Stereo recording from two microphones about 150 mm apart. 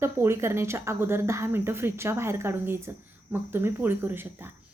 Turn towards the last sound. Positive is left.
turn(degrees=-15)  # may be behind; listen again after turning